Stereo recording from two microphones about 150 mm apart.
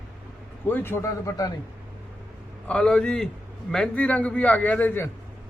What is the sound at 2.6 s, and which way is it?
A man's voice, 5° left (ahead or behind).